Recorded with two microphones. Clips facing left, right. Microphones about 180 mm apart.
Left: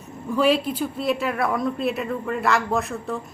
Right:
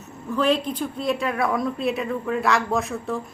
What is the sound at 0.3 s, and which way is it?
Speech, 10° left (ahead or behind).